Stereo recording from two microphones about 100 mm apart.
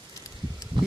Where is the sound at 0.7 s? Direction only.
55° right (ahead or behind).